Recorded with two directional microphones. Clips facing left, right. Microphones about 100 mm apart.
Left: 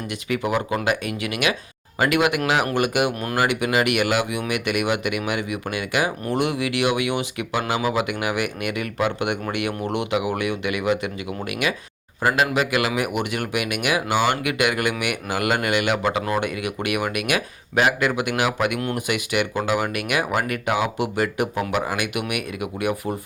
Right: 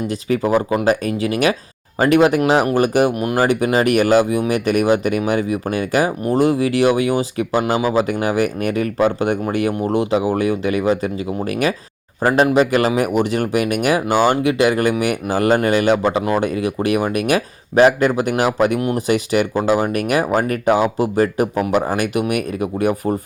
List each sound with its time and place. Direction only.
0.1 s speech: 35° right (ahead or behind)